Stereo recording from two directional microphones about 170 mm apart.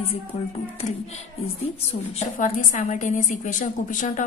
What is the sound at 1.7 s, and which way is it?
A woman's voice, 40° left (ahead or behind).